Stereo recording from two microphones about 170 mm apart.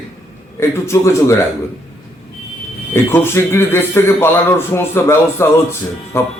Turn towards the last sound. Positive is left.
turn(degrees=15)  # may be behind; listen again after turning